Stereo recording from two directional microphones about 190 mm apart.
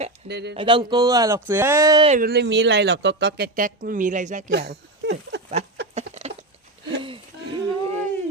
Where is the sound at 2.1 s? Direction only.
50° right (ahead or behind).